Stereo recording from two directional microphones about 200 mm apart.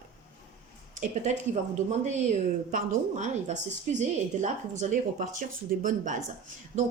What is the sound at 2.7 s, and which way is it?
Speech, 40° right (ahead or behind).